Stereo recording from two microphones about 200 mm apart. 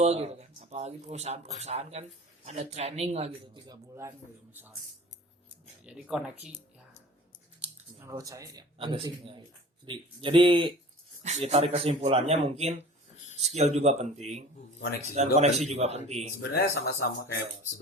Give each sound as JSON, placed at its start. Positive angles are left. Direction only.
{"t": 0.0, "sound": "speech", "side_deg": -35}
{"t": 5.8, "sound": "speech", "side_deg": -5}
{"t": 7.6, "sound": "speech", "side_deg": -15}
{"t": 16.4, "sound": "speech", "side_deg": 55}